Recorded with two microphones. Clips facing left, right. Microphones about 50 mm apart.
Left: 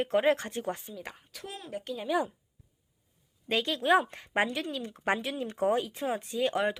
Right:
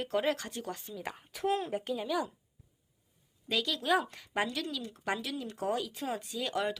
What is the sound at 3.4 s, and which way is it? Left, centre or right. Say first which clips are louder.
Speech: left 4 dB; left.